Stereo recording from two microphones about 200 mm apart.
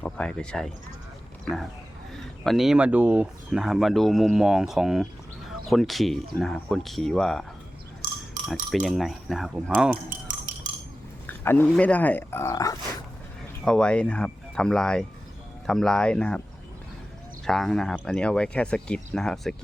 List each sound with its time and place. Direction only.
0.0 s speech: 5° left (ahead or behind)
2.4 s speech: centre (ahead or behind)
8.7 s speech: centre (ahead or behind)
10.1 s dishes: 40° right (ahead or behind)
11.3 s a sound: 10° left (ahead or behind)
11.7 s speech: 5° left (ahead or behind)
13.7 s speech: 5° left (ahead or behind)
17.4 s speech: centre (ahead or behind)